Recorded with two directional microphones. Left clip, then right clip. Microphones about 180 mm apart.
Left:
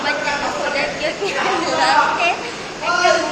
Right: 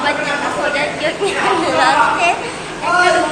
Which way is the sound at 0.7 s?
Centre (ahead or behind).